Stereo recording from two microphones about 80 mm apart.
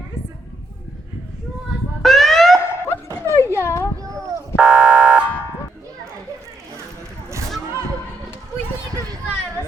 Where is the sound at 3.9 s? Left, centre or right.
Right.